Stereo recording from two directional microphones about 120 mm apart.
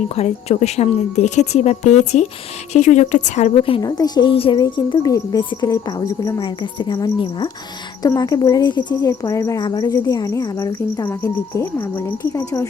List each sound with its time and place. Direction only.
0.2 s a woman's voice: 60° left (ahead or behind); by 3.5 s 80° left
3.8 s speech: 35° left (ahead or behind)
4.6 s a woman's voice: 30° left (ahead or behind)
6.4 s speech: 40° left (ahead or behind)
11.1 s a woman's voice: 20° left (ahead or behind)